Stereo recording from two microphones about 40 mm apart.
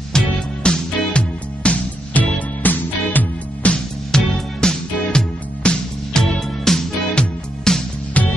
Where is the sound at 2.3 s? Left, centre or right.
Left.